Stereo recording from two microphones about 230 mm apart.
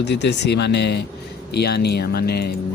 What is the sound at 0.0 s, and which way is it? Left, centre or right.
Speech, left.